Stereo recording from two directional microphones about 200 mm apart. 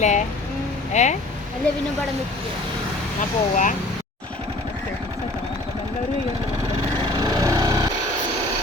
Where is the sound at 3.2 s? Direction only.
40° left (ahead or behind).